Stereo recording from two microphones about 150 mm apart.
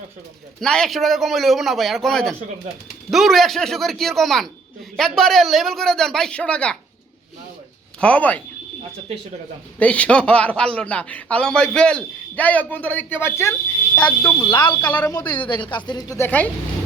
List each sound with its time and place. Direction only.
0.6 s a man's voice: 5° left (ahead or behind)
8.0 s a man's voice: 10° left (ahead or behind)
9.7 s a man's voice: 10° left (ahead or behind)
14.4 s speech: 30° left (ahead or behind); by 16.5 s 15° left (ahead or behind)